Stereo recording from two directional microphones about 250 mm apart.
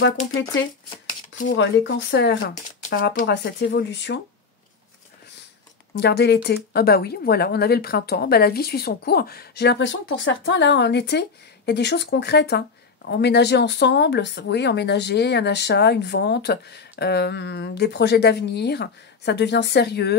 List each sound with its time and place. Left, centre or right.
1.5 s speech: left
5.9 s speech: left